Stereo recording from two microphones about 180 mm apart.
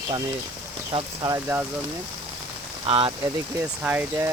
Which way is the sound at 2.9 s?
30° right (ahead or behind).